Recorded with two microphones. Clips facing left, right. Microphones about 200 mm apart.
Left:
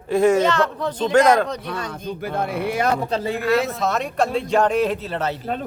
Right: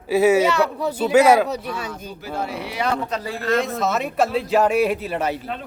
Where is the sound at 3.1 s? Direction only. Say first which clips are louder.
Left 4 dB; 25° left (ahead or behind).